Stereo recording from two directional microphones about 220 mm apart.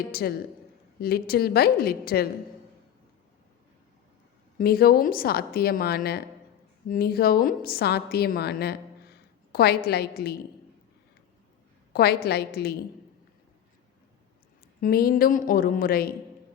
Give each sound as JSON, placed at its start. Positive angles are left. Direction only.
{"t": 0.1, "sound": "a woman's voice", "side_deg": 45}
{"t": 4.5, "sound": "a woman's voice", "side_deg": 45}
{"t": 11.9, "sound": "a woman's voice", "side_deg": 45}
{"t": 14.8, "sound": "a woman's voice", "side_deg": 40}